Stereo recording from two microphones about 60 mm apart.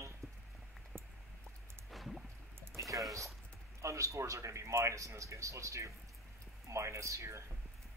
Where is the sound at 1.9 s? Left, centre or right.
Centre.